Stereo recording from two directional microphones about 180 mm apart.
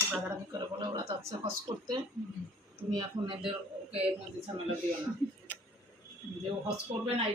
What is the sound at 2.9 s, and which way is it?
Speech, 25° right (ahead or behind).